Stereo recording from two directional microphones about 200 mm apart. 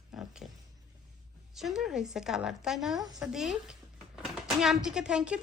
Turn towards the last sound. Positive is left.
turn(degrees=-5)  # may be behind; listen again after turning